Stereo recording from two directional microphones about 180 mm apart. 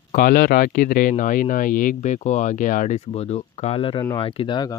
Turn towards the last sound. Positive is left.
turn(degrees=25)  # may be behind; listen again after turning